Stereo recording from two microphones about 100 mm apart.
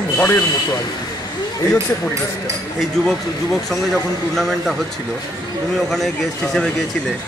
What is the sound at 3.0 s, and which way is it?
A man's voice, 5° left (ahead or behind).